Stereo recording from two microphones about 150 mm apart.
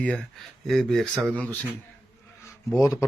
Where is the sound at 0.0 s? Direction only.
5° left (ahead or behind).